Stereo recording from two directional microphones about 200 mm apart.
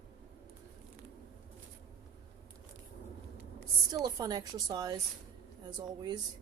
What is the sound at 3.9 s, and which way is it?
A woman's voice, 20° right (ahead or behind).